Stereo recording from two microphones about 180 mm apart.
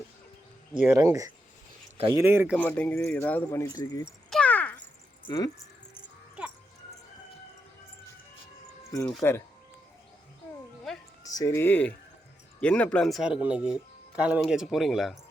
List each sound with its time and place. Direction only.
0.8 s speech: 15° right (ahead or behind)
2.6 s speech: 10° left (ahead or behind)
4.3 s a sound: 5° left (ahead or behind)
5.3 s speech: 25° left (ahead or behind)
5.9 s music: 5° right (ahead or behind)
9.2 s speech: 15° left (ahead or behind)
11.3 s speech: 15° left (ahead or behind); by 15.2 s centre (ahead or behind)